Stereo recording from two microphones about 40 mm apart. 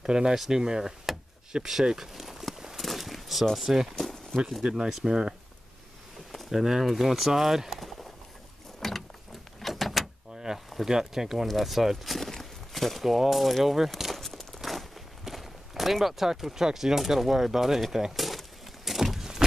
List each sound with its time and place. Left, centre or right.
0.0 s speech: centre
2.0 s a sound: centre
3.5 s speech: centre
3.9 s a sound: centre
4.8 s speech: centre
6.5 s speech: centre
8.8 s mechanisms: centre
9.6 s a sound: centre
10.9 s speech: centre
14.1 s crumpling: centre
14.6 s speech: centre
18.1 s a sound: centre